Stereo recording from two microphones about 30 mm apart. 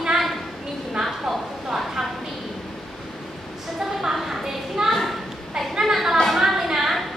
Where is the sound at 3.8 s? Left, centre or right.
Centre.